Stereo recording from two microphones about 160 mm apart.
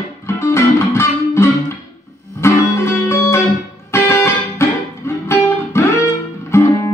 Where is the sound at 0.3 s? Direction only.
15° left (ahead or behind).